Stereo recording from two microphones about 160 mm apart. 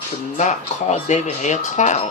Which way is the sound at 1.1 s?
50° left (ahead or behind).